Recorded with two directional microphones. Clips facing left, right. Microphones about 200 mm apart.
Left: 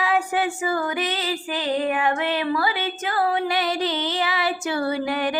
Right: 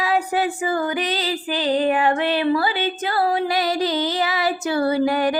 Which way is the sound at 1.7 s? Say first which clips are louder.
Right 4 dB; 30° right (ahead or behind).